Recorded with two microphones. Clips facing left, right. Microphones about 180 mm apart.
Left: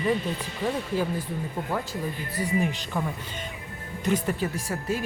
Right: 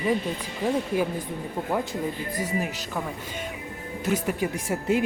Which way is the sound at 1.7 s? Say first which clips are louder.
Right 4 dB; 20° right (ahead or behind).